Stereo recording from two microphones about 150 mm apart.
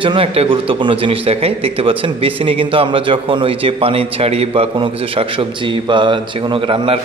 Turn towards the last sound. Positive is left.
turn(degrees=-35)  # may be behind; listen again after turning